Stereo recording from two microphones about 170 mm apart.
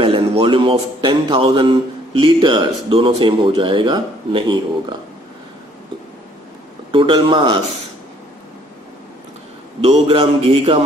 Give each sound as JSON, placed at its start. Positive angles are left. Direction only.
{"t": 0.0, "sound": "a man's voice", "side_deg": -35}
{"t": 6.9, "sound": "a man's voice", "side_deg": -30}
{"t": 9.8, "sound": "a man's voice", "side_deg": -35}